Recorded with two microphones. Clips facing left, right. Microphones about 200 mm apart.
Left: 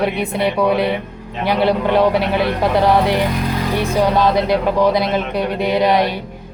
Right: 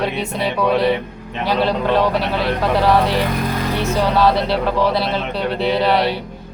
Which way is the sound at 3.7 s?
15° left (ahead or behind).